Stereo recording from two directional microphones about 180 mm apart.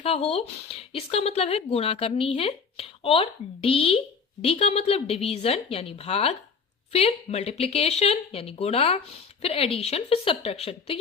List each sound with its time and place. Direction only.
0.0 s speech: 35° left (ahead or behind)